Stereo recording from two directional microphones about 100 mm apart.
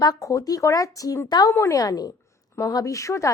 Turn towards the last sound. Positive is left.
turn(degrees=30)  # may be behind; listen again after turning